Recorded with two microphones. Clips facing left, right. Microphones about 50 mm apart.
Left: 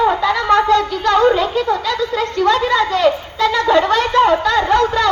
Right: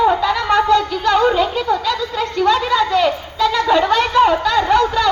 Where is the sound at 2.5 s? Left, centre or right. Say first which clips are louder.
Left 1 dB; left.